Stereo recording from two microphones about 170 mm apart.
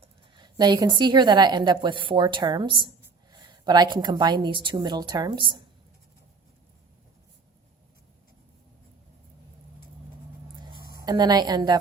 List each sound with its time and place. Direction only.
0.3 s a woman's voice: 25° right (ahead or behind)
11.0 s a woman's voice: 25° right (ahead or behind)